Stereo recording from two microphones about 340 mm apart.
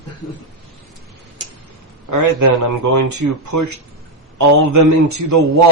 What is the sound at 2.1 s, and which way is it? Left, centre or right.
A man's voice, right.